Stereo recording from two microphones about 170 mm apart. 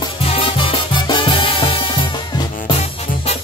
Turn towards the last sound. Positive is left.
turn(degrees=40)  # may be behind; listen again after turning